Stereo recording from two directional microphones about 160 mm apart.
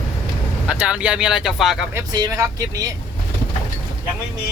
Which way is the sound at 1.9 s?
20° right (ahead or behind).